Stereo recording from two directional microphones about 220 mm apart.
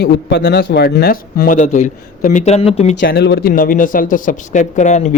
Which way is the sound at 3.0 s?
45° left (ahead or behind).